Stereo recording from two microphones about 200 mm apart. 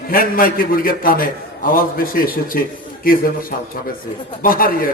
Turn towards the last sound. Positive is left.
turn(degrees=45)  # may be behind; listen again after turning